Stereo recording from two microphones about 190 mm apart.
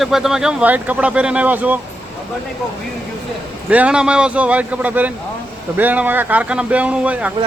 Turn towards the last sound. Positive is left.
turn(degrees=-5)  # may be behind; listen again after turning